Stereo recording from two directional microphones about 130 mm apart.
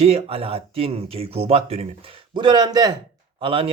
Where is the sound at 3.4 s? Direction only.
45° right (ahead or behind).